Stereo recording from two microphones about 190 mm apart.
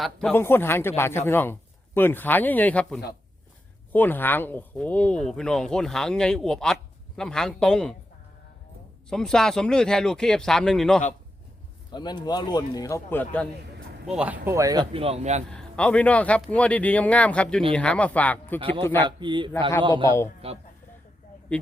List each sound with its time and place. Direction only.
0.0 s a man's voice: 5° left (ahead or behind)
9.0 s speech: 5° left (ahead or behind)
11.9 s speech: 20° left (ahead or behind)
14.1 s speech: 5° right (ahead or behind)
14.9 s speech: 30° right (ahead or behind)
15.4 s a man's voice: 5° left (ahead or behind)
18.6 s speech: 25° right (ahead or behind)